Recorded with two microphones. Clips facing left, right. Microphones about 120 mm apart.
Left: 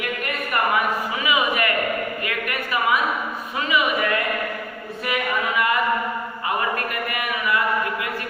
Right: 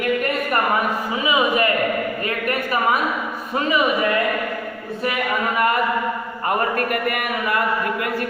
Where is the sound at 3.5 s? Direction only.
40° right (ahead or behind).